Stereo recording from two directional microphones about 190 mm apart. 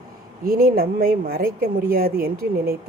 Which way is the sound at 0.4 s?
50° right (ahead or behind).